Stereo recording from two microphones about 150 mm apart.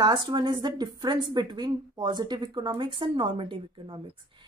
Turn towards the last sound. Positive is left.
turn(degrees=-35)  # may be behind; listen again after turning